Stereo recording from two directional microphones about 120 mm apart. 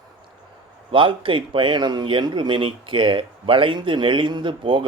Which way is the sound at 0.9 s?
45° right (ahead or behind).